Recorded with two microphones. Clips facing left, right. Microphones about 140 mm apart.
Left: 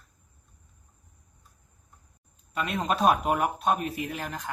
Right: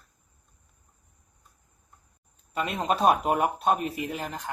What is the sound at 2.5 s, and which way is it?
Speech, 25° right (ahead or behind).